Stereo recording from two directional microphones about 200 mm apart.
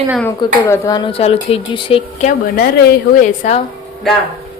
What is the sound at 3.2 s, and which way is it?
Speech, 35° left (ahead or behind).